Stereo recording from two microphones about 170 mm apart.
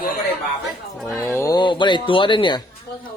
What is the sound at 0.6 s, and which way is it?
Speech, centre (ahead or behind).